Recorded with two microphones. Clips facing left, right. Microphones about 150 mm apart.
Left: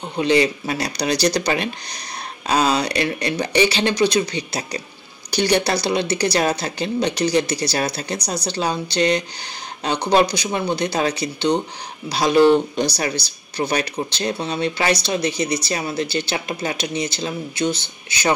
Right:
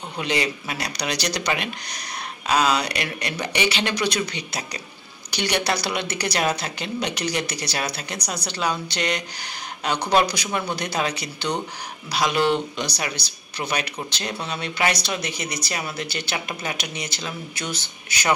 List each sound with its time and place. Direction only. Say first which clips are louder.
0.2 s a woman's voice: left 8 dB; 30° left (ahead or behind)